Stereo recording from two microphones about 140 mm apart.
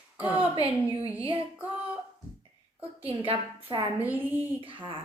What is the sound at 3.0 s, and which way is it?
Speech, 40° right (ahead or behind).